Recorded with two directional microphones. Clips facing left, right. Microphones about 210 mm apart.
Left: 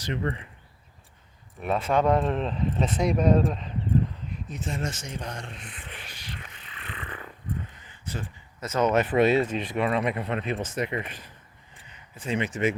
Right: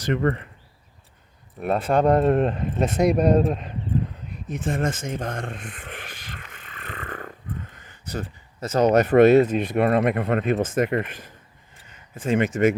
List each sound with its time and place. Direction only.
0.0 s speech: 50° right (ahead or behind)
1.6 s speech: 35° right (ahead or behind)
6.5 s a sound: 45° right (ahead or behind)
8.6 s speech: 35° right (ahead or behind)